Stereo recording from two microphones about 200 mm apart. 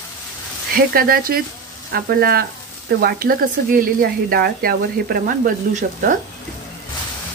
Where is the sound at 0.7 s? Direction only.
45° right (ahead or behind).